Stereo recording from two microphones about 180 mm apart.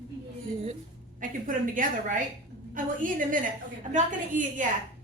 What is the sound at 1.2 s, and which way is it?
Speech, 50° right (ahead or behind).